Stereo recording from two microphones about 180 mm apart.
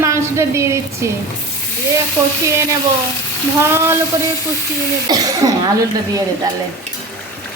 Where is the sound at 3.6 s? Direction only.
15° right (ahead or behind).